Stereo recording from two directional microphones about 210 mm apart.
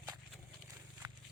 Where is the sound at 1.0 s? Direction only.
15° right (ahead or behind).